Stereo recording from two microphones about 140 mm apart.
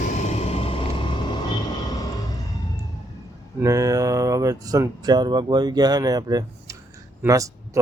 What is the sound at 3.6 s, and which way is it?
Speech, 25° right (ahead or behind).